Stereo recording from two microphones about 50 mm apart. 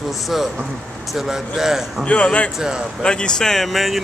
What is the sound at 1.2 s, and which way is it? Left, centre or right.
Speech, centre.